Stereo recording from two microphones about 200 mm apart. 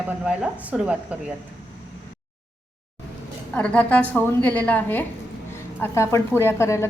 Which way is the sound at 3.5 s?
5° left (ahead or behind).